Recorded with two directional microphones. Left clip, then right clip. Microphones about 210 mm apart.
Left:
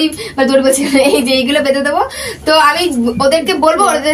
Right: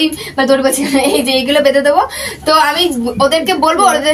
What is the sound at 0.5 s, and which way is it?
A woman's voice, 10° right (ahead or behind).